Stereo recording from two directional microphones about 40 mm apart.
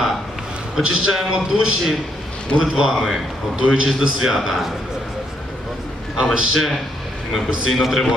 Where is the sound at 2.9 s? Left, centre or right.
Centre.